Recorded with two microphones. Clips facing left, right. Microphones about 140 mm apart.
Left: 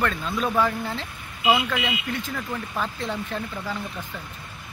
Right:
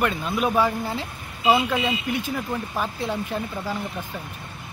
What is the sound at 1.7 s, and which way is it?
Speech, 30° right (ahead or behind).